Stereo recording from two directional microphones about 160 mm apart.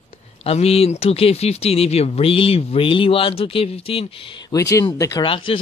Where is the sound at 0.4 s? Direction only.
40° left (ahead or behind); by 5.2 s 20° left (ahead or behind).